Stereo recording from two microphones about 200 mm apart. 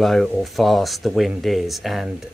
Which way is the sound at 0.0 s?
Centre (ahead or behind).